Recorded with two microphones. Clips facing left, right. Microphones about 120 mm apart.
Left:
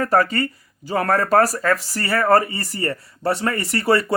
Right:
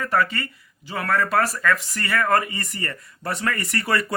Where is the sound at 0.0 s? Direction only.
40° left (ahead or behind).